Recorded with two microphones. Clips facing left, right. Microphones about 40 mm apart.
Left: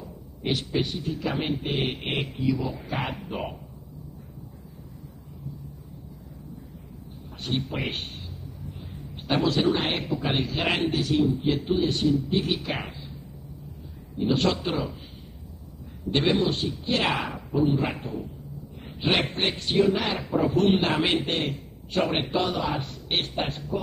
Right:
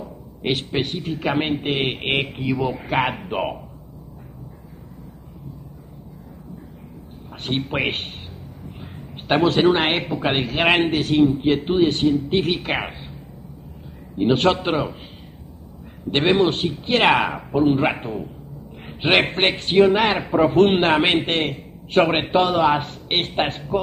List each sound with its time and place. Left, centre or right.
0.0 s a man's voice: right
7.4 s a man's voice: right
14.1 s a man's voice: right
16.1 s a man's voice: right